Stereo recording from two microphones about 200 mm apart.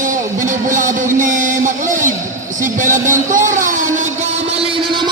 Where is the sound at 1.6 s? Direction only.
40° right (ahead or behind).